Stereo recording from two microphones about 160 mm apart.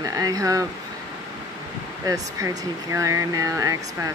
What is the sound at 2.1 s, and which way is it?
Speech, 20° right (ahead or behind).